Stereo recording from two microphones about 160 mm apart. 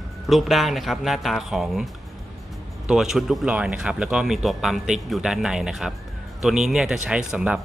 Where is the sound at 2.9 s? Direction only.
5° right (ahead or behind).